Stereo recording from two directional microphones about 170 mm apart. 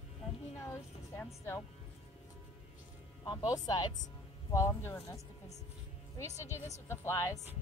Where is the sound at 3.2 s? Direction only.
25° left (ahead or behind).